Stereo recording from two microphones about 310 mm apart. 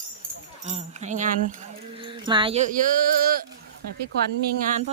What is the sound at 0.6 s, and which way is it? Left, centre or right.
Speech, right.